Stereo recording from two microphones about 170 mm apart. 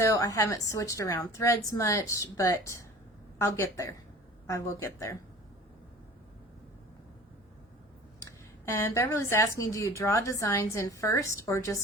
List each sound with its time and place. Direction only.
0.0 s a woman's voice: 20° left (ahead or behind)
8.6 s a woman's voice: 15° left (ahead or behind)